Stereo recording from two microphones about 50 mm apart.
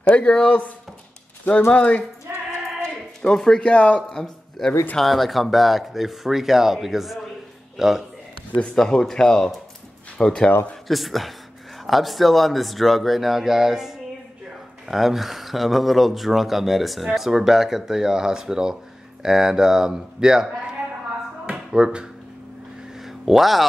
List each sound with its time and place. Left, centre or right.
0.1 s speech: left
3.2 s speech: centre
3.5 s speech: left
4.1 s a man's voice: centre
4.9 s a man's voice: centre
8.7 s speech: centre
10.9 s speech: centre
21.5 s music: centre
22.9 s a sound: centre